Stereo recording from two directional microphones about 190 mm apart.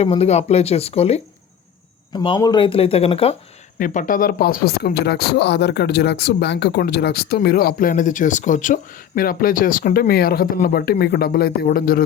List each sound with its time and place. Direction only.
0.0 s speech: 35° left (ahead or behind)
3.8 s speech: 45° left (ahead or behind)